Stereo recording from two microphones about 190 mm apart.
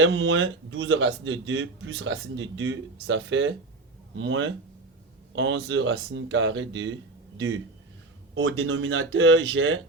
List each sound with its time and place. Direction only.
0.0 s a man's voice: 75° right (ahead or behind)